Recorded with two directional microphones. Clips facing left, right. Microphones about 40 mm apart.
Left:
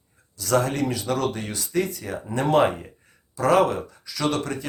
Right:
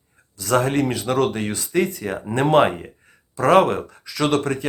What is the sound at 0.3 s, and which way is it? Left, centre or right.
Speech, right.